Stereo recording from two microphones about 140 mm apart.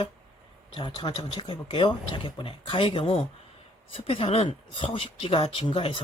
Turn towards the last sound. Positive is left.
turn(degrees=40)  # may be behind; listen again after turning